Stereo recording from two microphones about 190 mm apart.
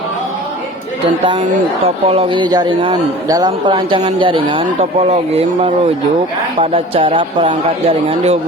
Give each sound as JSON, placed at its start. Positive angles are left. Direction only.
{"t": 1.8, "sound": "speech", "side_deg": -30}